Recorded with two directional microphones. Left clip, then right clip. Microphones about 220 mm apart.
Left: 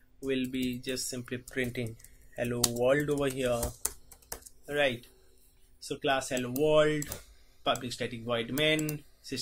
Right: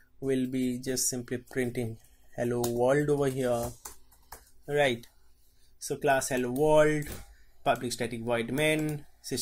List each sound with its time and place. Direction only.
0.2 s speech: 30° right (ahead or behind)
4.6 s speech: 30° right (ahead or behind)